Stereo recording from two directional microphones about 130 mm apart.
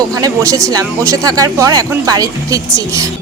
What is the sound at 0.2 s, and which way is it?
Speech, 25° right (ahead or behind).